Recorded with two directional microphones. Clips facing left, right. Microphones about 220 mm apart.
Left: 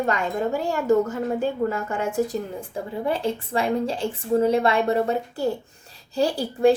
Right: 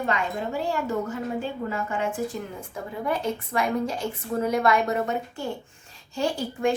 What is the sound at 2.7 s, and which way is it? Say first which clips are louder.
A woman's voice: left 3 dB; 30° left (ahead or behind).